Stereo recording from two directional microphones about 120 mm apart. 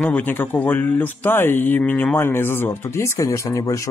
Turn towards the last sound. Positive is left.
turn(degrees=30)  # may be behind; listen again after turning